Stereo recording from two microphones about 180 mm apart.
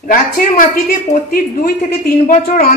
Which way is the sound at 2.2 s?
50° left (ahead or behind).